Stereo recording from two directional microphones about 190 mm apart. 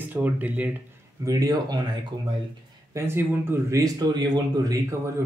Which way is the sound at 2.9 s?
15° right (ahead or behind).